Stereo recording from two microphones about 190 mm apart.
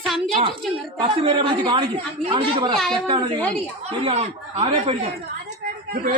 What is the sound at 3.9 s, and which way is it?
A man's voice, 25° right (ahead or behind).